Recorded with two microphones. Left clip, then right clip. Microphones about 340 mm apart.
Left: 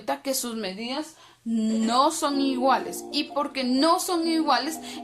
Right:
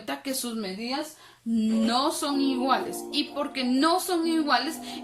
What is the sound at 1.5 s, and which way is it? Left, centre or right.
A woman's voice, centre.